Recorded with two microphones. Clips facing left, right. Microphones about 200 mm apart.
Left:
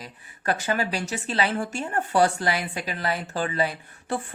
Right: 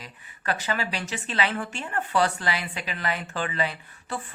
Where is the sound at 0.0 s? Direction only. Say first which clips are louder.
Left 4 dB; 45° left (ahead or behind).